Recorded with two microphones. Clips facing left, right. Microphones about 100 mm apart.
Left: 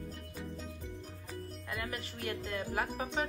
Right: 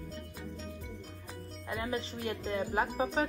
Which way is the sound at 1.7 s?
25° right (ahead or behind).